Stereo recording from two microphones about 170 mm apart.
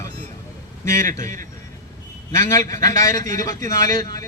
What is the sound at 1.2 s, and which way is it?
Speech, 50° right (ahead or behind).